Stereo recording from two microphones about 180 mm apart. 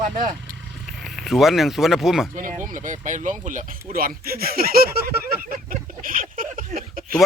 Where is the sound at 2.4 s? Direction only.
45° right (ahead or behind).